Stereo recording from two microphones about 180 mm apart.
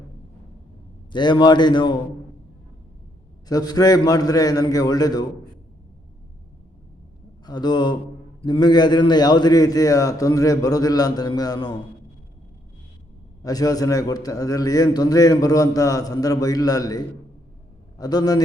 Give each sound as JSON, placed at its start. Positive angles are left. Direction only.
{"t": 1.1, "sound": "a man's voice", "side_deg": 25}
{"t": 3.5, "sound": "a man's voice", "side_deg": 20}
{"t": 7.4, "sound": "a man's voice", "side_deg": 25}
{"t": 13.4, "sound": "a man's voice", "side_deg": 20}